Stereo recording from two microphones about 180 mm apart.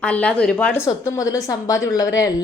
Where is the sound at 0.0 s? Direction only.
5° left (ahead or behind).